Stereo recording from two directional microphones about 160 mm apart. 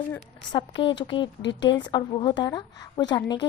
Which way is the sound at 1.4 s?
90° left.